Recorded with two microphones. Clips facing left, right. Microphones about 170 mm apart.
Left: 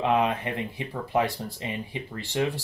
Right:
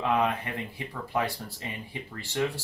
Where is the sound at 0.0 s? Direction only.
20° left (ahead or behind).